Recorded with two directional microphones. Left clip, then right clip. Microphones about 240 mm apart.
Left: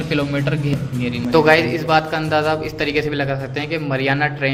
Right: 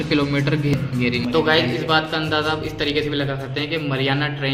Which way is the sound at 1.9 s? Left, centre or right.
Left.